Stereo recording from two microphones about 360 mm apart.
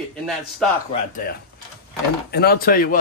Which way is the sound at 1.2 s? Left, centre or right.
Left.